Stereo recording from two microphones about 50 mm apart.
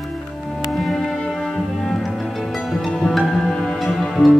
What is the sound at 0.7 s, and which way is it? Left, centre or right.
Music, centre.